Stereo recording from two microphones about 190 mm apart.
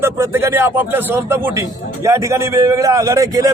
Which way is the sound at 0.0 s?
15° right (ahead or behind).